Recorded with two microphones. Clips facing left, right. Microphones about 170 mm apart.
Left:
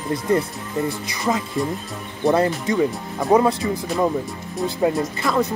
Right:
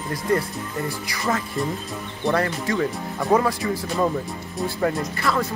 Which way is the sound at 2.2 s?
20° left (ahead or behind).